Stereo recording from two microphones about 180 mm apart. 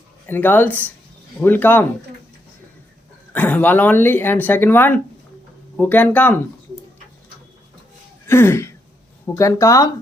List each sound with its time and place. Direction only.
0.3 s speech: 10° left (ahead or behind)
3.3 s speech: 10° left (ahead or behind)
8.3 s speech: 15° left (ahead or behind)